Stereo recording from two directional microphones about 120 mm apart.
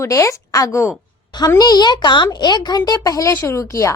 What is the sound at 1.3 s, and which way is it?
Speech, 35° left (ahead or behind).